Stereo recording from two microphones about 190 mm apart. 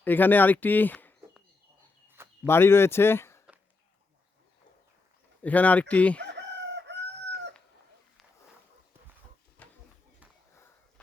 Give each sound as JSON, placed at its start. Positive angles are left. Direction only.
{"t": 0.0, "sound": "speech", "side_deg": 10}
{"t": 2.0, "sound": "a sound", "side_deg": -10}
{"t": 2.5, "sound": "speech", "side_deg": 10}
{"t": 5.4, "sound": "speech", "side_deg": 10}
{"t": 6.2, "sound": "chicken", "side_deg": -65}
{"t": 9.6, "sound": "a sound", "side_deg": 10}